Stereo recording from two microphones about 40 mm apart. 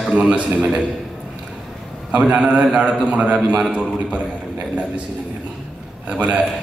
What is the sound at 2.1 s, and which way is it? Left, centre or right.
A man's voice, right.